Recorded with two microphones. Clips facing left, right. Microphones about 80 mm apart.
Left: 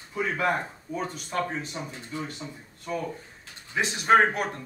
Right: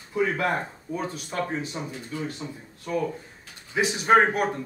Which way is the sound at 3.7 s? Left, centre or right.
Centre.